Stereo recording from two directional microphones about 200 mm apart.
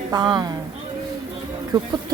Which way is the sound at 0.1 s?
20° right (ahead or behind).